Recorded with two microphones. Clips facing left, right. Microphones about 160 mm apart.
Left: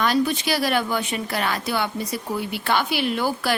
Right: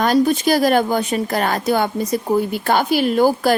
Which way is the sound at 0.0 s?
45° right (ahead or behind).